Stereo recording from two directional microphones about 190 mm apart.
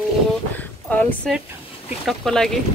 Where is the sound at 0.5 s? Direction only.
10° left (ahead or behind).